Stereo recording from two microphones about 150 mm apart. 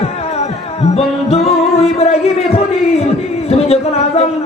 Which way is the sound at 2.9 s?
45° left (ahead or behind).